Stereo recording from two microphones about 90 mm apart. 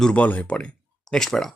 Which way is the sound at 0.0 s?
15° left (ahead or behind).